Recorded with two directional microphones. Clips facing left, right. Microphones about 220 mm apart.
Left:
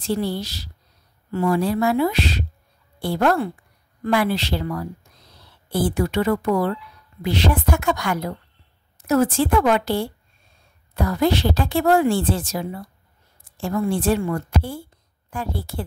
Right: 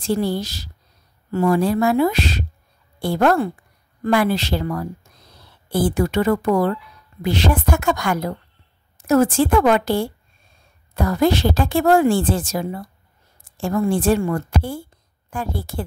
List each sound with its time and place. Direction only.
0.0 s speech: 45° right (ahead or behind)